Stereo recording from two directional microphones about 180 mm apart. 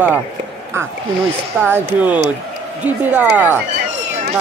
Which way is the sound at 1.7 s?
10° right (ahead or behind).